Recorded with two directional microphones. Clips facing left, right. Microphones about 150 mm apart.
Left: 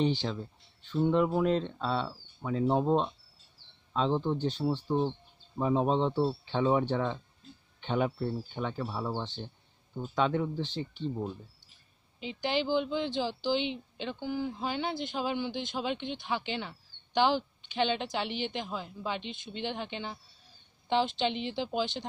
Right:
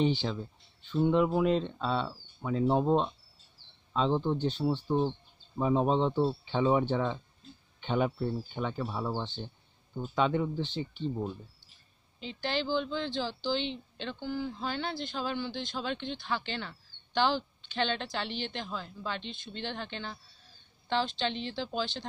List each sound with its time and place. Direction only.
0.0 s speech: centre (ahead or behind)
12.2 s speech: 10° left (ahead or behind)